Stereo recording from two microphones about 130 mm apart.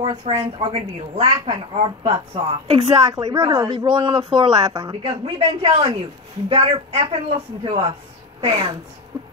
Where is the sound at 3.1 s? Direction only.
30° right (ahead or behind).